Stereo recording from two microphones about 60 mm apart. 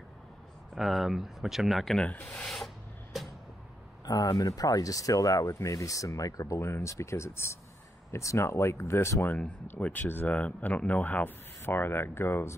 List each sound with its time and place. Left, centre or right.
0.7 s speech: centre
2.4 s spray: centre
4.0 s speech: left
9.7 s speech: left